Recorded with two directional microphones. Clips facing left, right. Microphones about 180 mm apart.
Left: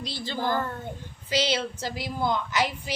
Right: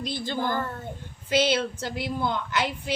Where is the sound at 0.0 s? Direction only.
50° right (ahead or behind).